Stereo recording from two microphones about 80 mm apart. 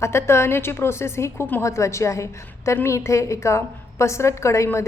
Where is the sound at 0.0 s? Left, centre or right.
Left.